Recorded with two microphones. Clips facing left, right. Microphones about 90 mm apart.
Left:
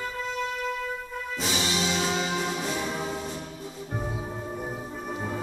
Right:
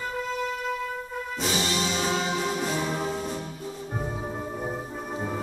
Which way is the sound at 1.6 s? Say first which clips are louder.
Left 1 dB; 40° right (ahead or behind).